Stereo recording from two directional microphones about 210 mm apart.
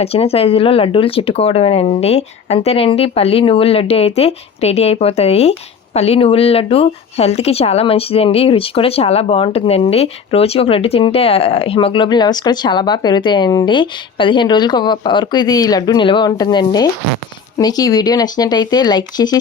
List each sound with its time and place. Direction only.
0.0 s speech: 30° left (ahead or behind)